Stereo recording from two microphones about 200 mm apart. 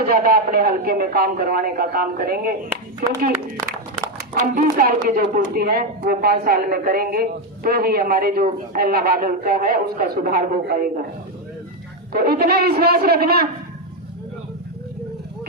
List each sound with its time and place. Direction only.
0.1 s speech: 50° right (ahead or behind)
4.5 s speech: 45° right (ahead or behind)
12.1 s speech: 50° right (ahead or behind)